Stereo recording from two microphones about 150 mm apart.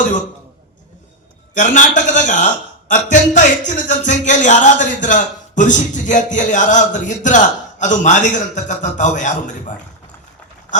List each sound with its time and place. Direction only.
1.5 s a man's voice: 55° left (ahead or behind)